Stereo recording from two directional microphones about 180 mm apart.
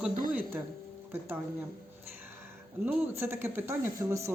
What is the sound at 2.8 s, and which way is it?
Speech, 10° right (ahead or behind).